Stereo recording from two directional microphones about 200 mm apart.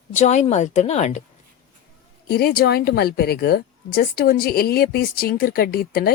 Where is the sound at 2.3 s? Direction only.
50° left (ahead or behind).